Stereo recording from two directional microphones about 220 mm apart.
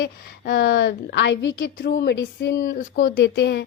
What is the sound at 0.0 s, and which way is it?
Speech, 45° left (ahead or behind).